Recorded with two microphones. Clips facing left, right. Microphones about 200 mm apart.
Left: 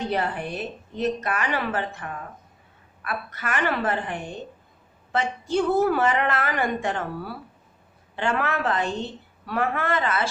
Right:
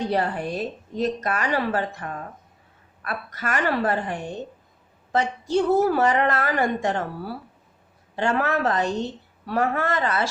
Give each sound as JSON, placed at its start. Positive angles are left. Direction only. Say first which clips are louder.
{"t": 0.0, "sound": "a woman's voice", "louder": "right 2 dB", "side_deg": -40}